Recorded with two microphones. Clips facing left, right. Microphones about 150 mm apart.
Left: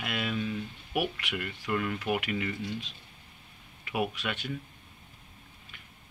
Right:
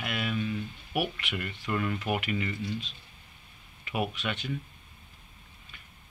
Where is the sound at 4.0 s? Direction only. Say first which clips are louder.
Even; 10° left (ahead or behind).